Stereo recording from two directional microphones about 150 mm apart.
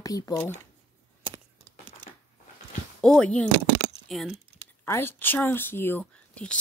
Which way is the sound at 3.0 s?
5° left (ahead or behind).